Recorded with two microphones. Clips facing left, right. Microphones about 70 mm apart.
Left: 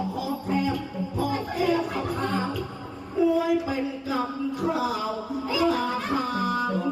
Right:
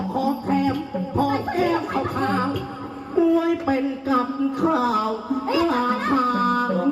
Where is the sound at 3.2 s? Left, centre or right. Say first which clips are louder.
Right 3 dB; right.